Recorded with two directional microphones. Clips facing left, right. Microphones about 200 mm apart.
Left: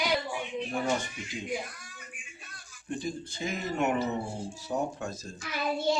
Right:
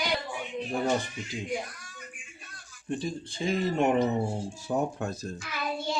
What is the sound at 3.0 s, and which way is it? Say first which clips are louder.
Speech: right 2 dB; 30° right (ahead or behind).